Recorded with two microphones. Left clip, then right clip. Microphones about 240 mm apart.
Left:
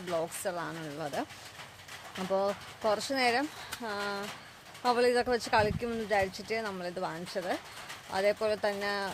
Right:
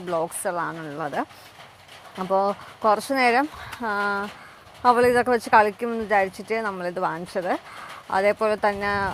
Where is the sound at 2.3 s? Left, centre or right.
Centre.